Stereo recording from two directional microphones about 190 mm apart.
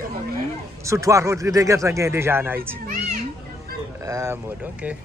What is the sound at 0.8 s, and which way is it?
Speech, 15° right (ahead or behind).